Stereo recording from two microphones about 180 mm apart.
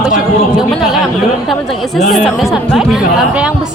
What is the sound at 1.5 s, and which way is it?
Speech, centre (ahead or behind).